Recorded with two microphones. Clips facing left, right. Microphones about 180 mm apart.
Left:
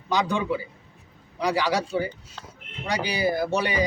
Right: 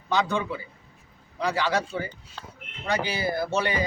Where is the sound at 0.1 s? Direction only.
15° left (ahead or behind).